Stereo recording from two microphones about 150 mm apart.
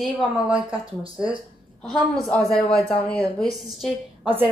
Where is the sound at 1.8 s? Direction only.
Centre (ahead or behind).